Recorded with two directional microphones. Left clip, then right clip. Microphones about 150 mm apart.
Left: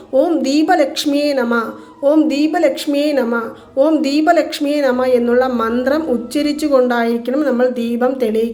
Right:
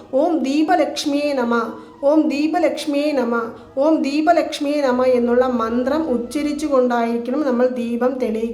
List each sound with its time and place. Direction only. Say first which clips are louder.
0.1 s a woman's voice: left 4 dB; 25° left (ahead or behind)